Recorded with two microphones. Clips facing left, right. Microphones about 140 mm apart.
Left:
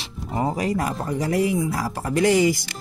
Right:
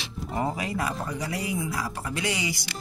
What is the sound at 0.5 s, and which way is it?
Speech, 40° left (ahead or behind).